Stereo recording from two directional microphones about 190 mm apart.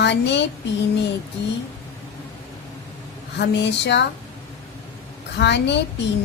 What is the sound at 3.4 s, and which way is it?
Speech, 65° left (ahead or behind).